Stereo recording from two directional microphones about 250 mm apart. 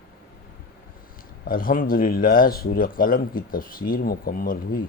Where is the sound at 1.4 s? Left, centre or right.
Left.